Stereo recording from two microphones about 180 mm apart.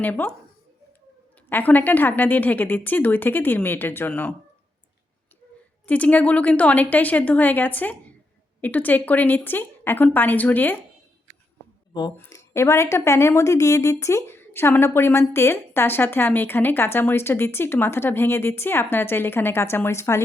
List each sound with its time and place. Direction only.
0.0 s a woman's voice: 10° left (ahead or behind)
1.5 s a woman's voice: 10° left (ahead or behind)
5.8 s a woman's voice: 10° left (ahead or behind)
11.9 s a woman's voice: 20° left (ahead or behind)